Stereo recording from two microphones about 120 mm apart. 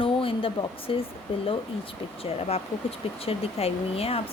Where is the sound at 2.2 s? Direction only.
55° left (ahead or behind).